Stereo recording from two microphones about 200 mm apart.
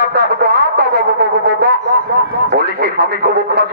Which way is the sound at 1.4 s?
55° right (ahead or behind).